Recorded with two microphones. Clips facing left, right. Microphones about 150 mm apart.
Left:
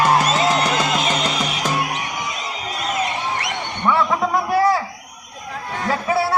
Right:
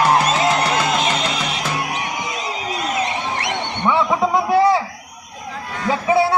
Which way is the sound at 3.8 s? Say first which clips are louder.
Right 1 dB; 20° right (ahead or behind).